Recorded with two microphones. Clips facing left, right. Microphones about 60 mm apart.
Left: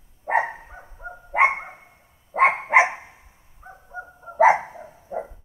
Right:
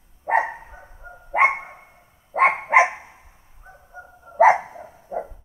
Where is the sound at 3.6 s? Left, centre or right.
Left.